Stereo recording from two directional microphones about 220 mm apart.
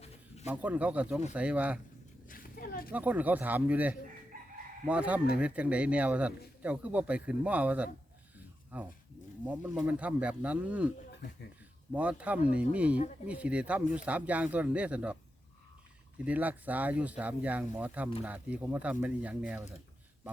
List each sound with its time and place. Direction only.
0.4 s a man's voice: 5° right (ahead or behind)
2.3 s a sound: 40° left (ahead or behind)
2.9 s a man's voice: 5° right (ahead or behind)
4.3 s chicken: 35° right (ahead or behind)
4.9 s a man's voice: 5° right (ahead or behind)